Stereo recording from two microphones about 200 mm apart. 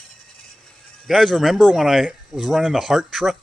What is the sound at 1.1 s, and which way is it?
Speech, centre (ahead or behind).